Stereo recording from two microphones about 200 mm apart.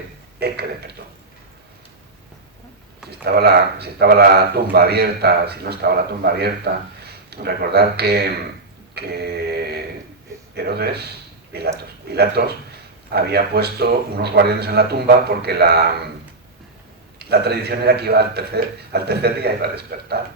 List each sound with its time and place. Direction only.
0.3 s speech: 50° right (ahead or behind)
3.1 s speech: 55° right (ahead or behind)
17.2 s speech: 55° right (ahead or behind)